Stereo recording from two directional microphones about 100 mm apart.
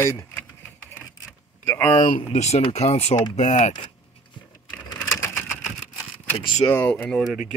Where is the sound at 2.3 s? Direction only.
90° left.